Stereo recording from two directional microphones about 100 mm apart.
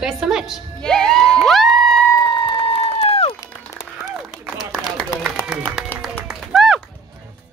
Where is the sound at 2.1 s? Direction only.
50° left (ahead or behind); by 3.3 s 80° left.